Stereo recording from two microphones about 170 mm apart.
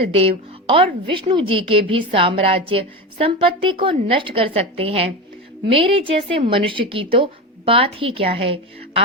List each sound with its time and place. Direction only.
0.1 s a woman's voice: 35° right (ahead or behind)